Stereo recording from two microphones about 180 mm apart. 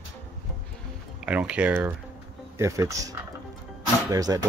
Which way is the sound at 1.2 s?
5° right (ahead or behind).